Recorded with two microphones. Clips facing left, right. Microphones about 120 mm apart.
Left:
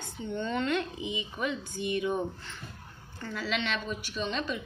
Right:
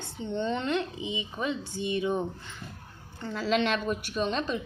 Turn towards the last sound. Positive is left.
turn(degrees=-40)  # may be behind; listen again after turning